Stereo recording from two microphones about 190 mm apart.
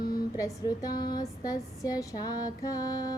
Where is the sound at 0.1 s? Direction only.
20° left (ahead or behind).